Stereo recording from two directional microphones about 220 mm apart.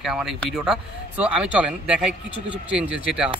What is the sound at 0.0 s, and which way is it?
A man's voice, centre (ahead or behind).